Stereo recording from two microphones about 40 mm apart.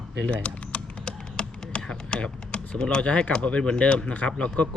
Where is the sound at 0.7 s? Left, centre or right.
Left.